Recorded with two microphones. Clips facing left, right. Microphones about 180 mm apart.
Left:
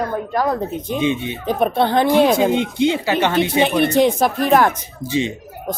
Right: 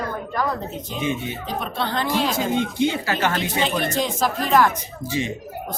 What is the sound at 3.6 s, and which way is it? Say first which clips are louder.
Speech: left 9 dB; 60° left (ahead or behind).